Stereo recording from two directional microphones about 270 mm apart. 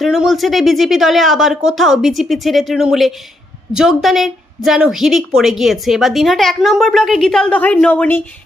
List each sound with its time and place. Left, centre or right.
0.0 s a woman's voice: centre